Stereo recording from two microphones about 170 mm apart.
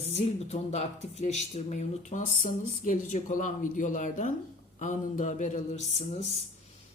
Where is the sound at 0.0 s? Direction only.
35° left (ahead or behind).